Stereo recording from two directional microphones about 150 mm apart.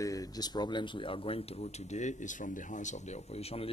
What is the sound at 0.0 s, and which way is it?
Speech, 25° left (ahead or behind).